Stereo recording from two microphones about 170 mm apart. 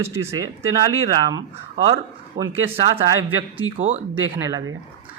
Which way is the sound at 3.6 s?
20° left (ahead or behind).